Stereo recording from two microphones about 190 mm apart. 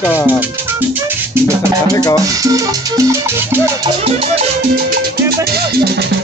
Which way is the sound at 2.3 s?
20° right (ahead or behind).